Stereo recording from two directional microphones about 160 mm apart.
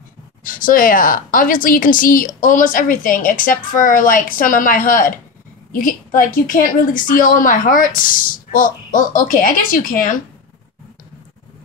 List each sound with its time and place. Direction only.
0.4 s a woman's voice: 60° left (ahead or behind)